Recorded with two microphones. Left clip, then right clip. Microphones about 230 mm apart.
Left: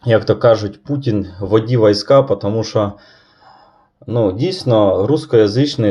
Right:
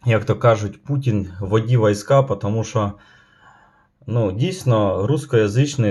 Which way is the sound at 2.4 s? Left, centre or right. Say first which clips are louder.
Left 6 dB; centre.